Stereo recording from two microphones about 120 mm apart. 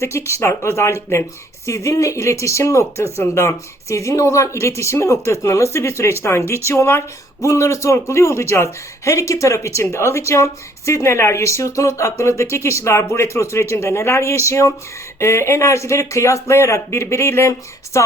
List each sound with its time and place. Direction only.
0.0 s speech: 25° left (ahead or behind)